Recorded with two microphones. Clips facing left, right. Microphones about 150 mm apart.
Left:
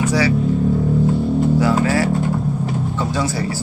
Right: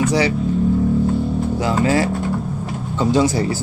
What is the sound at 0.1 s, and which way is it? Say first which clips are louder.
Speech: even; 20° right (ahead or behind).